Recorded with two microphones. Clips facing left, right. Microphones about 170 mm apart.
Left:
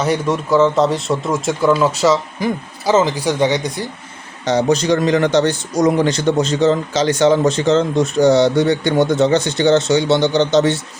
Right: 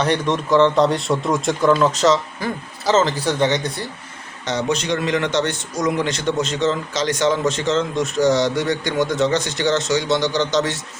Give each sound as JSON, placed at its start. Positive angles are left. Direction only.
{"t": 0.0, "sound": "a man's voice", "side_deg": 5}
{"t": 4.4, "sound": "a man's voice", "side_deg": 35}